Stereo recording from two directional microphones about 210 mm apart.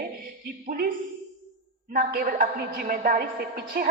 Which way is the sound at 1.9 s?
45° right (ahead or behind).